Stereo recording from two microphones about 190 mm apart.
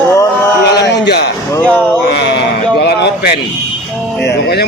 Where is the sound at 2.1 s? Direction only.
65° left (ahead or behind).